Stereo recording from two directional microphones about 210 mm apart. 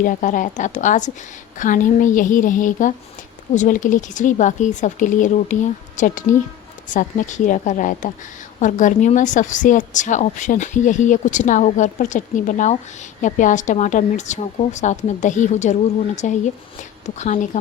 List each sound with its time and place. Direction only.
0.0 s a woman's voice: 40° left (ahead or behind)